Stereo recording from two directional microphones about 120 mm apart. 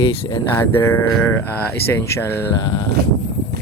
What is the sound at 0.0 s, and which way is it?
Speech, 40° left (ahead or behind).